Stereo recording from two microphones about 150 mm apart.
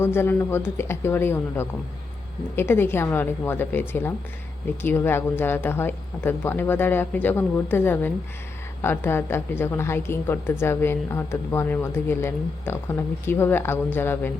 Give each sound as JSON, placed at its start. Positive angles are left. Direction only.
{"t": 0.0, "sound": "a woman's voice", "side_deg": 15}